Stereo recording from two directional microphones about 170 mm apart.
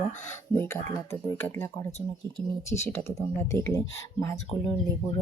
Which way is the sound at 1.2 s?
15° left (ahead or behind).